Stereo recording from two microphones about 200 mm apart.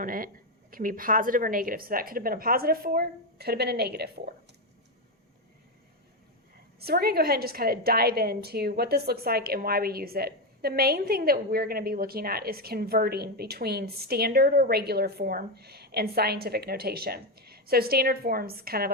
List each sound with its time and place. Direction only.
0.0 s a woman's voice: 45° right (ahead or behind)
6.7 s a woman's voice: 50° right (ahead or behind)